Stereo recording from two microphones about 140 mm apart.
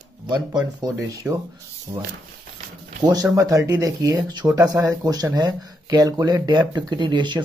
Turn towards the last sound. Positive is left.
turn(degrees=-35)  # may be behind; listen again after turning